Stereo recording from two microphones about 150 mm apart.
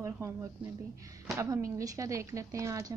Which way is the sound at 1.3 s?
20° right (ahead or behind).